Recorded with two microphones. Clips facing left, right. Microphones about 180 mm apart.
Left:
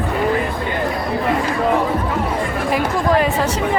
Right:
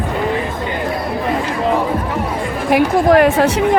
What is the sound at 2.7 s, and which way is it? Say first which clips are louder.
Speech: right 7 dB; 65° right (ahead or behind).